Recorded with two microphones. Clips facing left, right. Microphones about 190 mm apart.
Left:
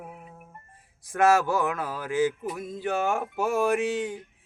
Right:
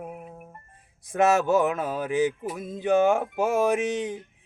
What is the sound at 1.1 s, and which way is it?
Speech, 20° right (ahead or behind).